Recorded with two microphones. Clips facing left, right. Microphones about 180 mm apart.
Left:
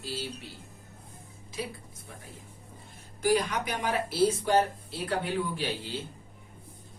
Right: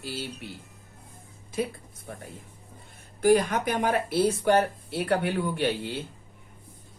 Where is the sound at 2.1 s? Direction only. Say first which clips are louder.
Right 8 dB; 55° right (ahead or behind).